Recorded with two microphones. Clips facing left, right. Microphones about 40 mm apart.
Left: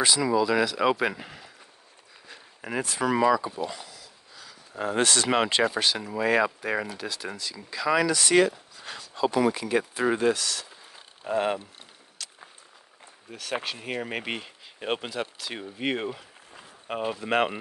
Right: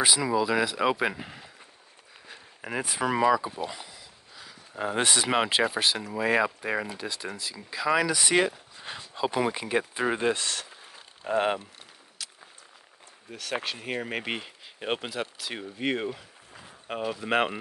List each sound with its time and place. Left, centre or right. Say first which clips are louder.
0.0 s speech: left 2 dB; centre
2.2 s a sound: left 1 dB; centre
2.8 s speech: left 1 dB; centre
10.3 s speech: even; right
12.2 s a sound: even; centre
13.3 s speech: even; centre